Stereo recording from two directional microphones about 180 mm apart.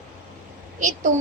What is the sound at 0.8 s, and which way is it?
Speech, 45° right (ahead or behind).